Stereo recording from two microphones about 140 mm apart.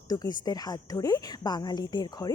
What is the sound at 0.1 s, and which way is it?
A woman's voice, 25° left (ahead or behind).